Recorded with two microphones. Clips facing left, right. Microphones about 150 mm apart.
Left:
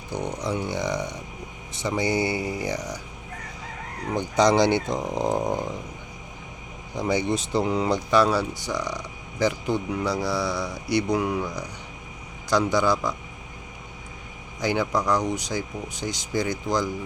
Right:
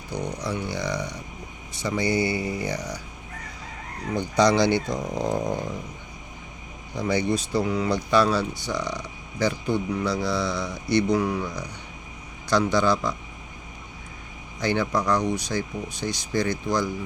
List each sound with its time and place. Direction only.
0.1 s speech: 50° left (ahead or behind)
0.4 s speech: 20° left (ahead or behind)
4.4 s speech: 15° left (ahead or behind)
6.9 s speech: 15° left (ahead or behind)
14.6 s speech: 15° left (ahead or behind)